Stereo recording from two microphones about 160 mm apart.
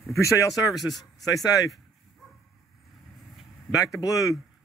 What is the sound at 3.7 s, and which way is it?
Speech, 20° left (ahead or behind).